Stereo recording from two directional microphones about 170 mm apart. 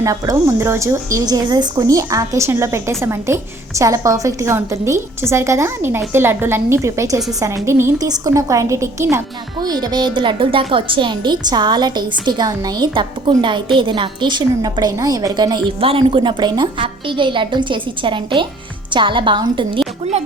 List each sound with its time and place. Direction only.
0.0 s a woman's voice: 20° right (ahead or behind)